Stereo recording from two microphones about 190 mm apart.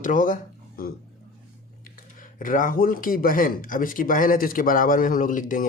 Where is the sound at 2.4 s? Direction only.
45° left (ahead or behind).